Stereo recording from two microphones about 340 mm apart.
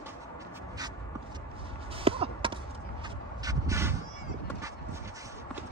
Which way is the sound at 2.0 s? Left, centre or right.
Centre.